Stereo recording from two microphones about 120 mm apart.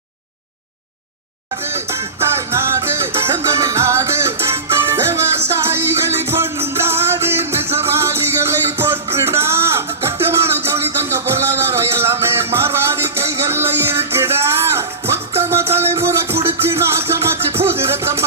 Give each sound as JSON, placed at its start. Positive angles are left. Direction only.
{"t": 1.6, "sound": "music", "side_deg": -20}